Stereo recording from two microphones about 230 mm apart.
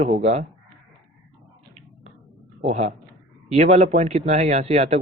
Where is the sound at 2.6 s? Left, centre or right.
Right.